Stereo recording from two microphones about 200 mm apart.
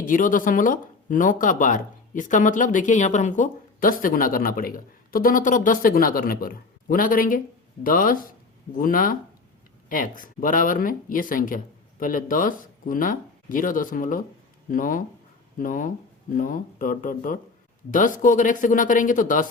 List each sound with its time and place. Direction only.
0.0 s speech: 40° left (ahead or behind)